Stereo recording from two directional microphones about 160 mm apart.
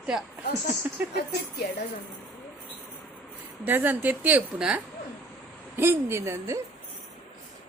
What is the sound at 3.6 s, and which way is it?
A woman's voice, 10° right (ahead or behind).